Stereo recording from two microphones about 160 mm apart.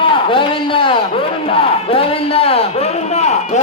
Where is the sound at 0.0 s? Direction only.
35° left (ahead or behind).